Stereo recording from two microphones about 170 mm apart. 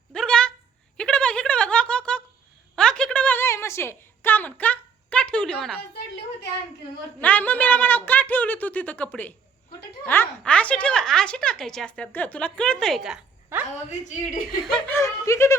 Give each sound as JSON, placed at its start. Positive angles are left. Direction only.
{"t": 0.1, "sound": "a sound", "side_deg": 5}
{"t": 7.2, "sound": "a woman's voice", "side_deg": 10}
{"t": 13.5, "sound": "a sound", "side_deg": -10}
{"t": 14.1, "sound": "speech", "side_deg": 50}
{"t": 14.6, "sound": "a woman's voice", "side_deg": 5}
{"t": 14.9, "sound": "speech", "side_deg": 15}